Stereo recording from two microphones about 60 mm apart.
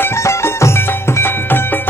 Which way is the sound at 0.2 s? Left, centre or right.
Left.